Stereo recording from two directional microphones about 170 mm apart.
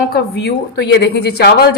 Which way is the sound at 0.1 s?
70° left (ahead or behind).